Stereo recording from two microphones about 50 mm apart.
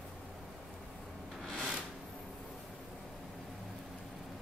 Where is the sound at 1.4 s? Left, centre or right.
Centre.